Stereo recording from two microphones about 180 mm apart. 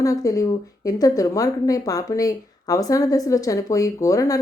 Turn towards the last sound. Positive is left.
turn(degrees=20)  # may be behind; listen again after turning